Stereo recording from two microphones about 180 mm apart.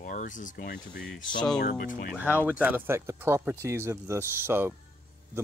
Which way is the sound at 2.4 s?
10° right (ahead or behind).